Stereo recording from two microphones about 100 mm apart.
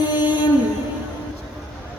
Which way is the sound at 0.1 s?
50° left (ahead or behind).